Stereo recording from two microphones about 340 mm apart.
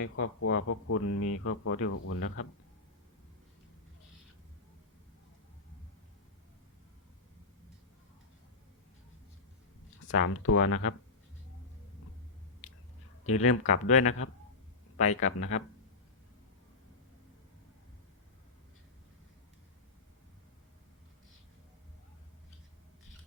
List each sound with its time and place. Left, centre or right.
0.0 s speech: left
10.1 s speech: left
13.2 s speech: left
13.7 s speech: left
14.0 s speech: left
15.4 s speech: left